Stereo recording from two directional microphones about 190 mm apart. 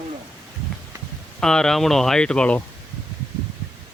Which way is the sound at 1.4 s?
5° left (ahead or behind).